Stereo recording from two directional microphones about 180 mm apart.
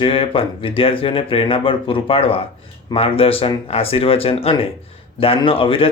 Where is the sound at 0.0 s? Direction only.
30° left (ahead or behind).